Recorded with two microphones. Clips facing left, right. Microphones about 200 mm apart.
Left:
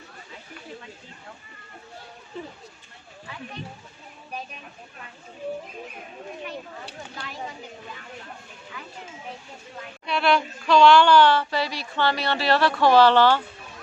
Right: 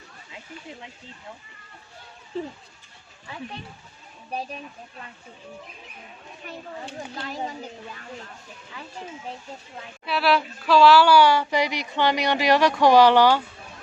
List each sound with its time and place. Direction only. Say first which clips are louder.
7.2 s speech: right 5 dB; 40° right (ahead or behind)
10.1 s speech: even; 5° right (ahead or behind)